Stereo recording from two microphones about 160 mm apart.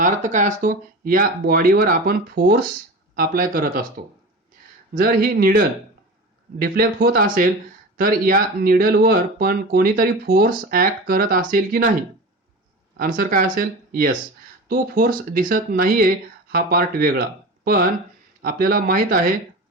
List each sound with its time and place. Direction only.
0.0 s speech: 50° right (ahead or behind)
13.0 s speech: 60° right (ahead or behind)